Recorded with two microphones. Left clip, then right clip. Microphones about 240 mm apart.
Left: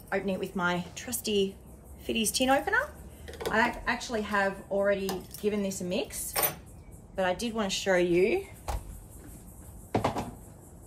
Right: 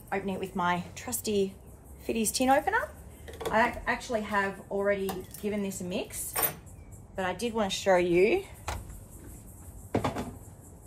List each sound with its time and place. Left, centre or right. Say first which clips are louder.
0.1 s a woman's voice: left 2 dB; centre
3.3 s a woman's voice: right 1 dB; centre
8.1 s speech: right 1 dB; right